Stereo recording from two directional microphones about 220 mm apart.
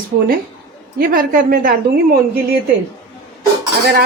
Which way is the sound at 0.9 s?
40° right (ahead or behind).